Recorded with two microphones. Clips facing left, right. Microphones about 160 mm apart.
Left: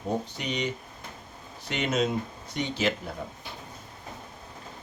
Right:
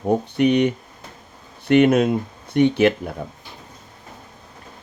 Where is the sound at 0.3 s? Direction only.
60° right (ahead or behind).